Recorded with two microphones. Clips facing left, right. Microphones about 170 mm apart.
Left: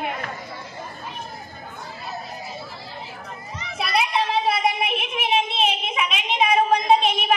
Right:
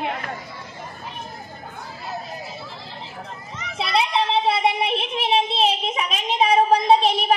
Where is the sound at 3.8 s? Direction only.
25° right (ahead or behind).